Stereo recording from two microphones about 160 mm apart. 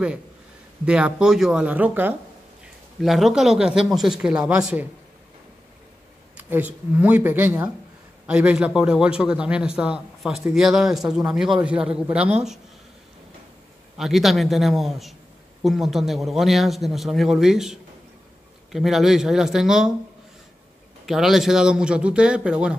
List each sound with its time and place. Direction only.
0.8 s speech: 5° right (ahead or behind)
3.0 s a man's voice: centre (ahead or behind)
6.3 s a man's voice: 10° right (ahead or behind)
13.9 s a man's voice: centre (ahead or behind)
21.0 s a man's voice: centre (ahead or behind)